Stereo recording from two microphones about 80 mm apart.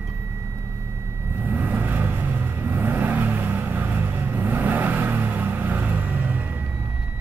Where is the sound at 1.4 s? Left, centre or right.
Right.